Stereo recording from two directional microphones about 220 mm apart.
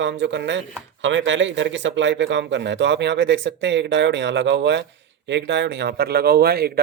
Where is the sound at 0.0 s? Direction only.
55° right (ahead or behind).